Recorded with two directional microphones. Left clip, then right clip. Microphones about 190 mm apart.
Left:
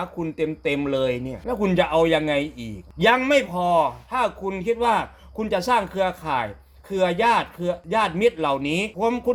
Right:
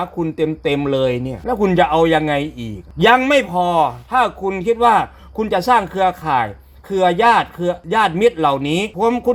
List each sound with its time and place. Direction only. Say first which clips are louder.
0.2 s speech: right 6 dB; 35° right (ahead or behind)